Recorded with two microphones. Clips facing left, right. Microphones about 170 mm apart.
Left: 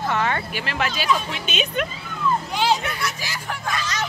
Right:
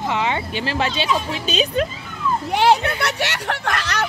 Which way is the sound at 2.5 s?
65° right (ahead or behind).